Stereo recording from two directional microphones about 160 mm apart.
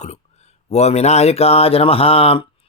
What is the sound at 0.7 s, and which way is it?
Speech, 45° left (ahead or behind).